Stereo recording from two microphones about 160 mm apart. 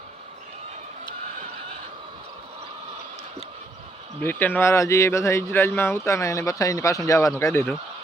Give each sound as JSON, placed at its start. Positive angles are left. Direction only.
{"t": 4.2, "sound": "speech", "side_deg": 10}